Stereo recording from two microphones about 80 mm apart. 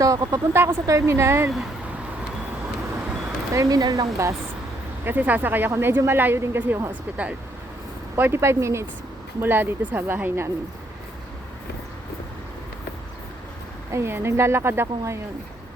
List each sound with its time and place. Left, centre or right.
0.0 s speech: right
0.5 s a woman's voice: right
3.5 s speech: right
5.0 s speech: right
8.1 s a woman's voice: right
13.9 s a woman's voice: right